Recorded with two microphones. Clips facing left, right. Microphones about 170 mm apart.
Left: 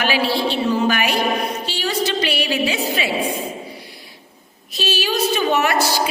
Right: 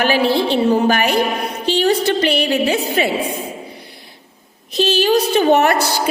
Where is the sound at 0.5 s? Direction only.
55° right (ahead or behind).